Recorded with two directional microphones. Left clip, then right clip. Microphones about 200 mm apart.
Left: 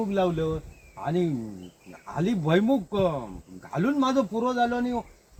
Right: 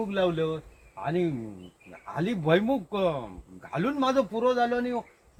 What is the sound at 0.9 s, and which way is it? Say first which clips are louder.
Speech: left 1 dB; 25° right (ahead or behind).